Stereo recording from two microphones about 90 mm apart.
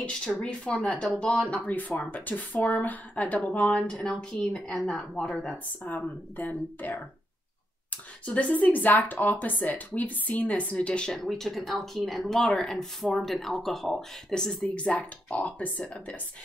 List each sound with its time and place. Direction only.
0.0 s speech: 10° left (ahead or behind)
5.9 s speech: 20° left (ahead or behind)